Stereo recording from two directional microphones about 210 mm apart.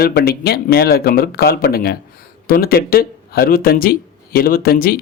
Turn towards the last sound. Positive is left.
turn(degrees=45)  # may be behind; listen again after turning